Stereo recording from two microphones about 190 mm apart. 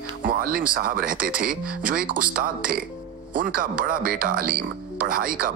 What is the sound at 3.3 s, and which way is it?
Speech, 45° right (ahead or behind).